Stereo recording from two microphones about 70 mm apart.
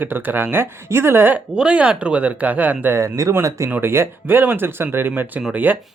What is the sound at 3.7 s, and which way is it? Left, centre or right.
Speech, right.